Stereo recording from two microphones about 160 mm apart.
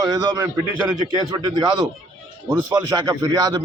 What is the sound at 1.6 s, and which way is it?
A man's voice, 25° right (ahead or behind).